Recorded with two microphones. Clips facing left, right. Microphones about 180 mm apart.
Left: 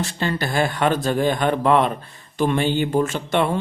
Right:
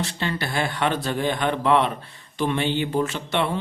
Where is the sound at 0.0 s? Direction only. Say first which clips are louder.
Left 3 dB; 45° left (ahead or behind).